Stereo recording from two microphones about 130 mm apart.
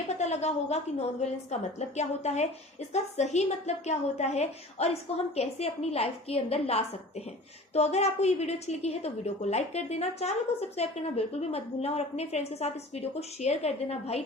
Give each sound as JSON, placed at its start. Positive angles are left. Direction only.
{"t": 0.2, "sound": "a woman's voice", "side_deg": 60}